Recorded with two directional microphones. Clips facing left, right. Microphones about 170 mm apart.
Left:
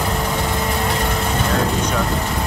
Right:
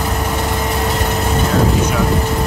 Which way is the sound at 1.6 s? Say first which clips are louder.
Right 4 dB; 5° right (ahead or behind).